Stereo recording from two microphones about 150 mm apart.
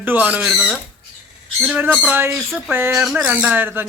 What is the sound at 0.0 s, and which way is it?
Speech, 10° right (ahead or behind).